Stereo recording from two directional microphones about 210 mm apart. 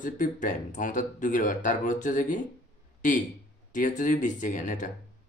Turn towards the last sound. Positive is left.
turn(degrees=35)  # may be behind; listen again after turning